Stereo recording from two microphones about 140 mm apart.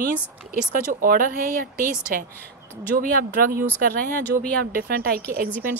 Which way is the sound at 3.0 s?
90° right.